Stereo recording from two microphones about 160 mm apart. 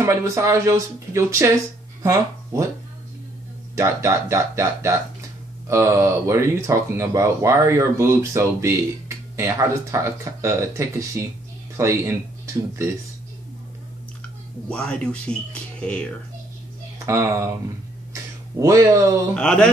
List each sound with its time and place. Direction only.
0.0 s speech: 20° right (ahead or behind)
3.7 s speech: 20° right (ahead or behind)
14.7 s speech: 5° left (ahead or behind)
17.0 s speech: 20° right (ahead or behind)
19.3 s speech: 5° left (ahead or behind)